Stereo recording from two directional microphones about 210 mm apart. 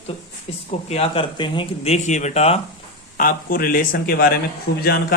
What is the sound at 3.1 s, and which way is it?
Speech, 40° left (ahead or behind).